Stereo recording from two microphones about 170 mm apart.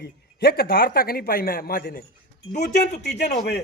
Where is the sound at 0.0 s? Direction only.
65° left (ahead or behind).